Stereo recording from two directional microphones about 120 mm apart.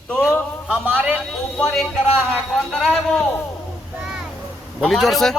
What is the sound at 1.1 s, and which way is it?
A man's voice, 5° left (ahead or behind).